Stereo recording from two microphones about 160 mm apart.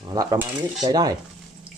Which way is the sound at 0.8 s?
25° right (ahead or behind).